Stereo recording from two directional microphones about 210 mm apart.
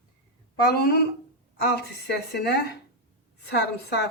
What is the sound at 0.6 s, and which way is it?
Speech, 45° left (ahead or behind).